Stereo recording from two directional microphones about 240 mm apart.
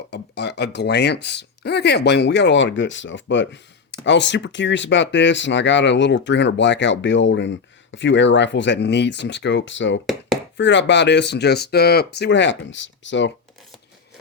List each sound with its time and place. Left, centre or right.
0.1 s speech: left